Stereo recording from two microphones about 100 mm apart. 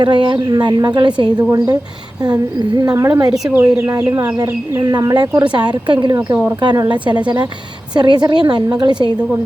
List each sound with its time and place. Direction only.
0.0 s a woman's voice: 50° right (ahead or behind); by 4.3 s 30° right (ahead or behind)
4.8 s a woman's voice: 45° right (ahead or behind)
7.9 s a woman's voice: 45° right (ahead or behind)